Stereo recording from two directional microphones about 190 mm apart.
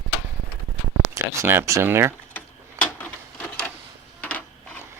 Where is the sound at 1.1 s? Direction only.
15° right (ahead or behind).